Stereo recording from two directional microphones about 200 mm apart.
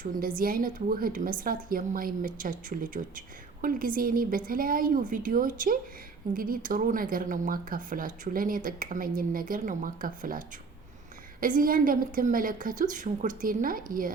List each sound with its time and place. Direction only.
0.3 s speech: 45° right (ahead or behind)